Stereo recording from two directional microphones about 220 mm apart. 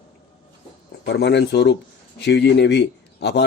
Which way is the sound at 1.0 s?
50° left (ahead or behind).